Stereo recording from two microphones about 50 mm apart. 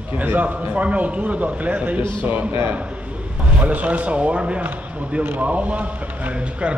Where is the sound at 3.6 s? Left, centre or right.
Right.